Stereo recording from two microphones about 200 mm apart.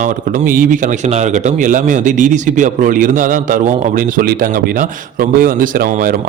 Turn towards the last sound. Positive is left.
turn(degrees=-40)  # may be behind; listen again after turning